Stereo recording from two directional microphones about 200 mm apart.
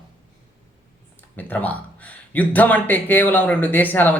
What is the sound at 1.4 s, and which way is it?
Speech, 10° left (ahead or behind).